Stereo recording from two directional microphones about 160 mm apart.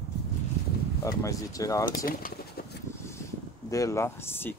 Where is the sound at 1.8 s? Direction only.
65° left (ahead or behind).